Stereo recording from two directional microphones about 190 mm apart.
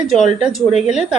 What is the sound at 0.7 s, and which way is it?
Speech, 35° left (ahead or behind).